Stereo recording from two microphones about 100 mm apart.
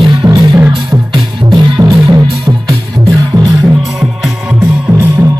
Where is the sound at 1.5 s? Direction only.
45° right (ahead or behind).